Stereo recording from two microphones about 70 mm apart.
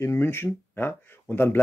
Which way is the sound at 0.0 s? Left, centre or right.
Left.